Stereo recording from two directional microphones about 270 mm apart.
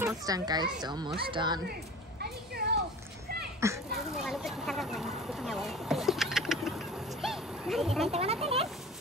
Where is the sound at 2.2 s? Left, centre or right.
Right.